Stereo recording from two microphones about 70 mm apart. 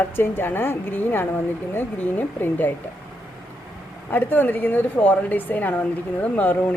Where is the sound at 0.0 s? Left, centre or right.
Left.